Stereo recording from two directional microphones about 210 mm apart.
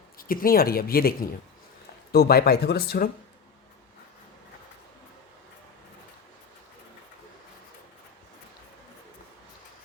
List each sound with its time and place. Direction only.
0.2 s speech: 45° left (ahead or behind)